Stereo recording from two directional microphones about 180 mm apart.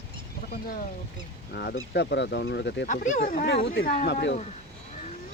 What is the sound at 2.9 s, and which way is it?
Speech, 45° left (ahead or behind).